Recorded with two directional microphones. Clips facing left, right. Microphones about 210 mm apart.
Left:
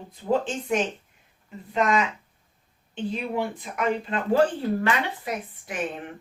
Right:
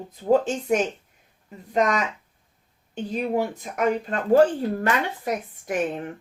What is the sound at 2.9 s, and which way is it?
Speech, 40° right (ahead or behind).